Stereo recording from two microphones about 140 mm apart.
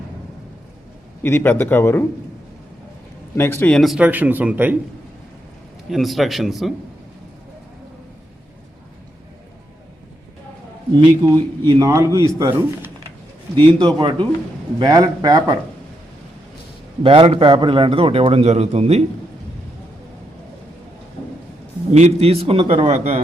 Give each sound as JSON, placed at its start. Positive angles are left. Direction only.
{"t": 1.2, "sound": "a man's voice", "side_deg": 15}
{"t": 3.3, "sound": "a man's voice", "side_deg": 15}
{"t": 3.8, "sound": "speech", "side_deg": 0}
{"t": 4.0, "sound": "speech", "side_deg": -10}
{"t": 5.9, "sound": "speech", "side_deg": 0}
{"t": 10.9, "sound": "speech", "side_deg": -25}
{"t": 13.8, "sound": "a man's voice", "side_deg": -35}
{"t": 17.0, "sound": "a man's voice", "side_deg": -40}
{"t": 21.9, "sound": "a man's voice", "side_deg": -50}